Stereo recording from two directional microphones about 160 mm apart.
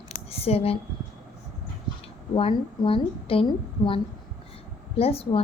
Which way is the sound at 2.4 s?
35° left (ahead or behind).